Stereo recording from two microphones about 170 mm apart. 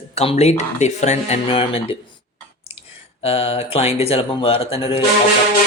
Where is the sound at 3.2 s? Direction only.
35° left (ahead or behind).